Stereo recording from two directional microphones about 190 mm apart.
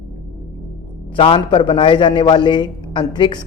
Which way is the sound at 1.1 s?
30° left (ahead or behind).